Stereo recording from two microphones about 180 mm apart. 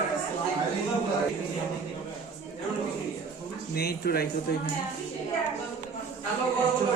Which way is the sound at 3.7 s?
60° left (ahead or behind).